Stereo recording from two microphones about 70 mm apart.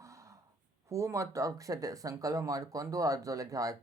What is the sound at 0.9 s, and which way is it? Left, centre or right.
Speech, right.